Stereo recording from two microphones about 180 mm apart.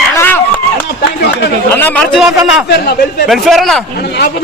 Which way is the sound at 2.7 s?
65° left (ahead or behind).